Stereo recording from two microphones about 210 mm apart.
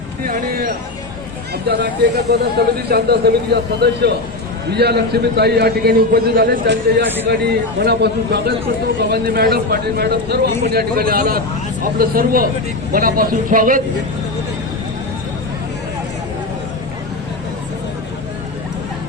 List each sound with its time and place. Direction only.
0.3 s a man's voice: 45° right (ahead or behind)